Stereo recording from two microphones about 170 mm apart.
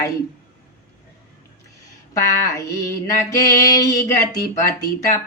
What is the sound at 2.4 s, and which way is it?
Mantra, 20° left (ahead or behind).